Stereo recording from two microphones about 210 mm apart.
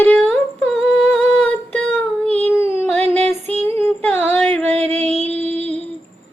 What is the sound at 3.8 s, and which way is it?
Yodeling, 5° left (ahead or behind).